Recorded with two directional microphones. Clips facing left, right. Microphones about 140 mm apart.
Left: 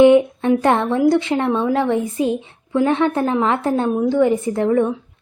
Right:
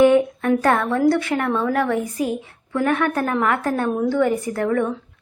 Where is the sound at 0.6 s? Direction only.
25° left (ahead or behind).